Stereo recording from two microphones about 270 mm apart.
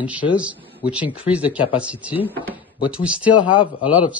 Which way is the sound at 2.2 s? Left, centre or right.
Centre.